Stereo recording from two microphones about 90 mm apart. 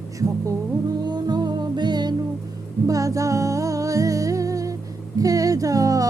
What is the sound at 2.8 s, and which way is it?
Music, 40° right (ahead or behind).